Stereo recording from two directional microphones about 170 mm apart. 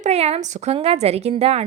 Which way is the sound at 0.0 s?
40° right (ahead or behind).